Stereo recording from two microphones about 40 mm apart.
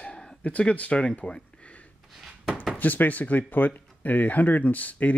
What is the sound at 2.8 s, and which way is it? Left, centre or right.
Speech, left.